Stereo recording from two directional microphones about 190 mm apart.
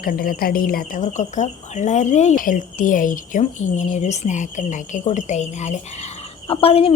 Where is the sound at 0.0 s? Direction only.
50° left (ahead or behind).